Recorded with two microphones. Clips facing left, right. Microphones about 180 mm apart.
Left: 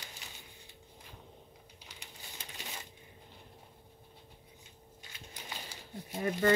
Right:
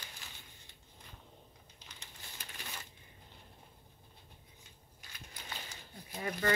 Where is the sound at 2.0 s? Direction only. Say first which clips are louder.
Left 3 dB; 20° left (ahead or behind).